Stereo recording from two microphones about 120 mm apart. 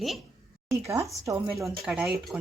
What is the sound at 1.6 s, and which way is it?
Speech, centre (ahead or behind).